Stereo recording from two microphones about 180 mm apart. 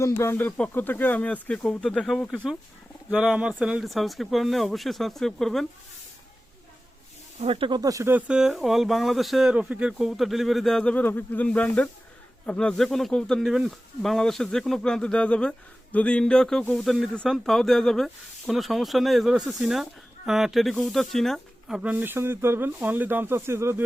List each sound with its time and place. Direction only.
0.0 s speech: 15° left (ahead or behind)
7.3 s speech: 35° right (ahead or behind); by 23.8 s 15° right (ahead or behind)